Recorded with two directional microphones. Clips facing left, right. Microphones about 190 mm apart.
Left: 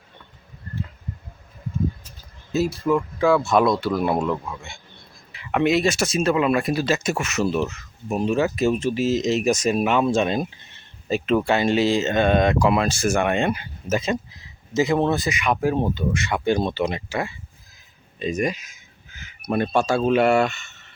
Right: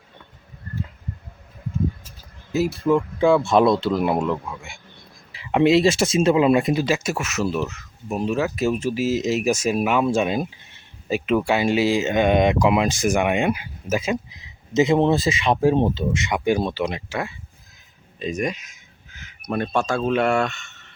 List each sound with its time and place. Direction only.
2.9 s speech: 25° right (ahead or behind)
5.3 s speech: 25° right (ahead or behind)
16.6 s speech: centre (ahead or behind)
18.2 s a sound: centre (ahead or behind)
19.5 s speech: 5° left (ahead or behind)